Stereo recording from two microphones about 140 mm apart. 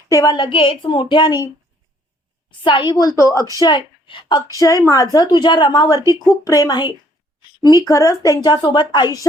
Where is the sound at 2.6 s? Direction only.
35° left (ahead or behind).